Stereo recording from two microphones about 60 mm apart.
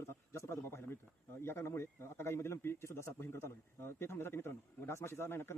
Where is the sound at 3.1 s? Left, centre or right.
Left.